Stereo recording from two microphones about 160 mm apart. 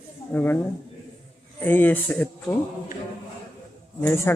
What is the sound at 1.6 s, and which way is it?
Speech, 10° left (ahead or behind).